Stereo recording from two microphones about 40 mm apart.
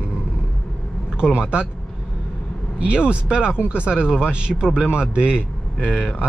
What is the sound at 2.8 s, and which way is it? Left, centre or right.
Speech, right.